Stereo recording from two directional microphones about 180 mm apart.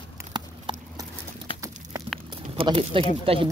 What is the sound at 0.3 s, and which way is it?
Clip-clop, 25° right (ahead or behind).